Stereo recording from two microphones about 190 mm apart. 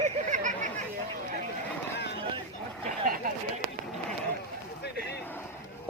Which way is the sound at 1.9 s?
60° left (ahead or behind).